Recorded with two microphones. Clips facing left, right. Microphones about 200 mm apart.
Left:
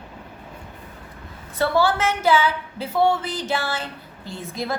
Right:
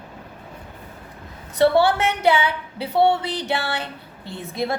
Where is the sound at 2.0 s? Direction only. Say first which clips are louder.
Even; 65° right (ahead or behind).